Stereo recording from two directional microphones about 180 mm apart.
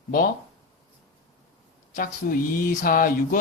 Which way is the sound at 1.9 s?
50° left (ahead or behind).